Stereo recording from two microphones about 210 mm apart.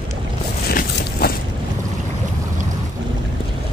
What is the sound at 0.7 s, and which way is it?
Boat, 45° left (ahead or behind).